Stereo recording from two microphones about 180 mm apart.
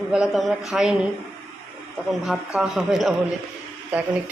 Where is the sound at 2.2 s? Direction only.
5° right (ahead or behind).